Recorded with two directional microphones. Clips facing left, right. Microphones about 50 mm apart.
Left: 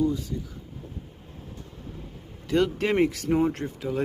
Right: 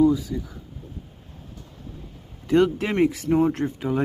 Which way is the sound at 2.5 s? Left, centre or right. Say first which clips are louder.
Right 5 dB; right.